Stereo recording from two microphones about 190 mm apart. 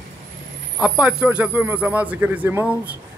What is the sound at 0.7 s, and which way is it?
A man's voice, 5° right (ahead or behind).